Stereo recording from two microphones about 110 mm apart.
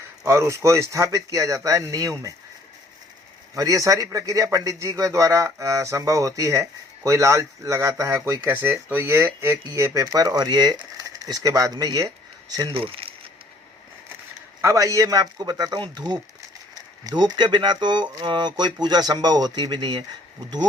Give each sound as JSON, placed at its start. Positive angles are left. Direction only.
{"t": 0.3, "sound": "speech", "side_deg": -25}
{"t": 3.5, "sound": "speech", "side_deg": -30}
{"t": 12.7, "sound": "speech", "side_deg": -55}
{"t": 14.6, "sound": "speech", "side_deg": -30}